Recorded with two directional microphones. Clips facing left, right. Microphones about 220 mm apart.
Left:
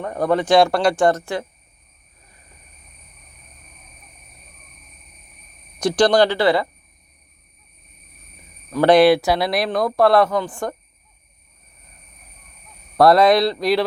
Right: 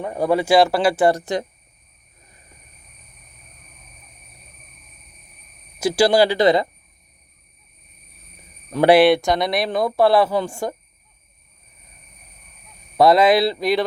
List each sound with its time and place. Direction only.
0.0 s speech: 10° right (ahead or behind)
1.2 s speech: 20° right (ahead or behind)
5.8 s speech: 5° right (ahead or behind)
8.9 s speech: centre (ahead or behind)
13.0 s speech: centre (ahead or behind)